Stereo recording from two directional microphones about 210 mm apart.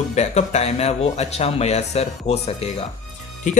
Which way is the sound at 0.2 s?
30° left (ahead or behind).